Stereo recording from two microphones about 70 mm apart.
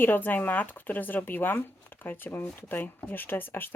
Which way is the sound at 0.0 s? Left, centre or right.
Left.